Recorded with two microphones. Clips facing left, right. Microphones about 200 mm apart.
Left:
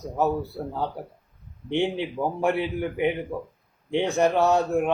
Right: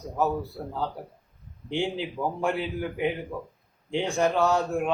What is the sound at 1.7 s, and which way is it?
Speech, 20° left (ahead or behind).